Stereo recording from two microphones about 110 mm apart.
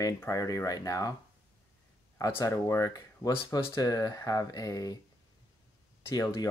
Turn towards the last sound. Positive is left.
turn(degrees=35)  # may be behind; listen again after turning